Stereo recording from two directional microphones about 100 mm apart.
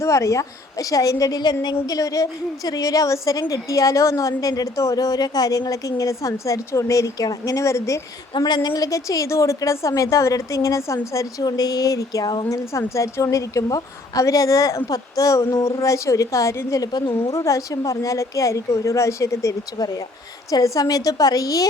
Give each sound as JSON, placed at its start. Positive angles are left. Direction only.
{"t": 0.0, "sound": "a woman's voice", "side_deg": 30}
{"t": 8.4, "sound": "a woman's voice", "side_deg": 45}
{"t": 8.7, "sound": "a woman's voice", "side_deg": 35}
{"t": 12.7, "sound": "a woman's voice", "side_deg": 30}